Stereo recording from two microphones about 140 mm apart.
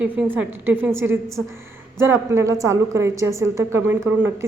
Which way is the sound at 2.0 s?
20° right (ahead or behind).